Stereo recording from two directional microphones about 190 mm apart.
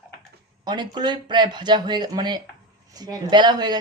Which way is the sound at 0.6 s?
20° right (ahead or behind).